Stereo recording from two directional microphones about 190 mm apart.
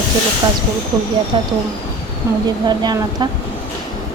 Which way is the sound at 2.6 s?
20° right (ahead or behind).